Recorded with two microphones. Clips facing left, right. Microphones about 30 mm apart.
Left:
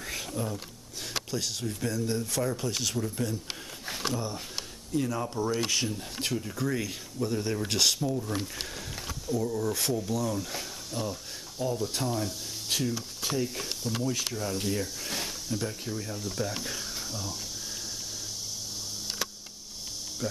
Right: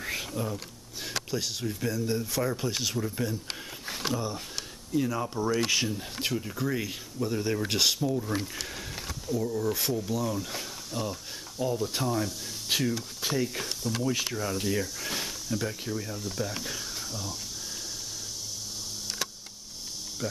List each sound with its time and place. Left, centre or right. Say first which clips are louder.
0.0 s a sound: right 2 dB; centre
1.0 s speech: right 1 dB; centre
3.8 s speech: right 1 dB; centre
12.6 s speech: right 2 dB; centre